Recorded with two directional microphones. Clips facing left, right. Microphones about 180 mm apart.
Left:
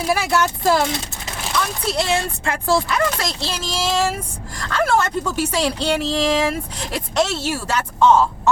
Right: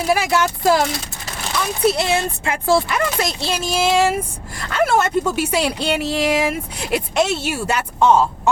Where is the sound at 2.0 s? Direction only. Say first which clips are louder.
Right 1 dB; 5° right (ahead or behind).